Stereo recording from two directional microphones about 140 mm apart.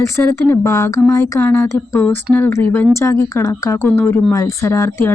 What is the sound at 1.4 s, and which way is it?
Speech, 15° left (ahead or behind).